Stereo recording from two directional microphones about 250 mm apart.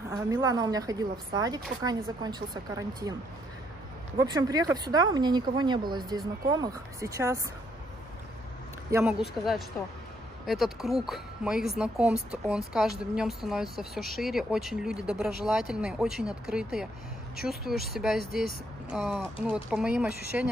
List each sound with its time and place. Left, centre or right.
0.3 s speech: centre
4.2 s speech: centre
8.9 s a woman's voice: centre
18.2 s speech: left
18.9 s a woman's voice: centre